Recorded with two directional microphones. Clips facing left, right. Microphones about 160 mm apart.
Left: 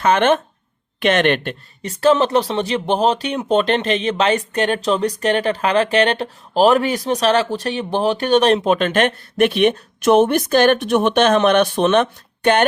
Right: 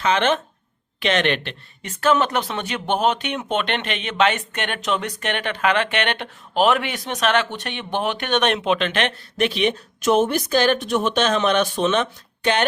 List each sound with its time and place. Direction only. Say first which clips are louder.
0.0 s speech: left 5 dB; 50° left (ahead or behind)
1.8 s speech: left 4 dB; 35° left (ahead or behind); by 12.6 s 55° left (ahead or behind)